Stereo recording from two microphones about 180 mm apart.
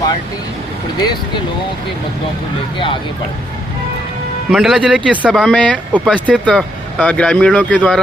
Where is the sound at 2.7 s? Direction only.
30° left (ahead or behind).